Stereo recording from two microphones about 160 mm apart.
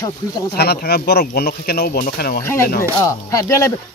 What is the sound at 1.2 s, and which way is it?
Speech, 70° left (ahead or behind).